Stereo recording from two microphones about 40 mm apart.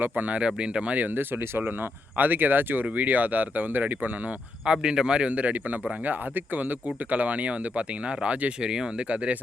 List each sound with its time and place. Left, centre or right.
0.0 s speech: right
0.3 s speech: right
0.9 s speech: right
2.1 s speech: right
4.6 s speech: right
6.1 s speech: right
9.0 s speech: right